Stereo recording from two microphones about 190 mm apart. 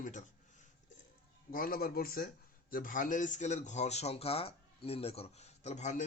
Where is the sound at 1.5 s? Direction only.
50° left (ahead or behind).